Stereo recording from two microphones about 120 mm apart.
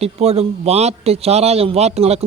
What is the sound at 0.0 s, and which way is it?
A man's voice, 60° right (ahead or behind).